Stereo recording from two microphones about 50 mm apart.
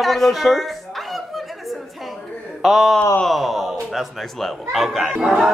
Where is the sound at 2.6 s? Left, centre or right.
Centre.